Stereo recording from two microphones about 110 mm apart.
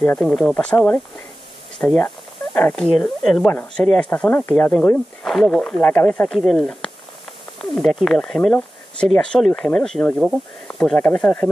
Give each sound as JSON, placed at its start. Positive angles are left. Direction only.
{"t": 0.2, "sound": "speech", "side_deg": 5}
{"t": 1.8, "sound": "speech", "side_deg": 20}
{"t": 5.2, "sound": "speech", "side_deg": 5}
{"t": 11.0, "sound": "speech", "side_deg": 15}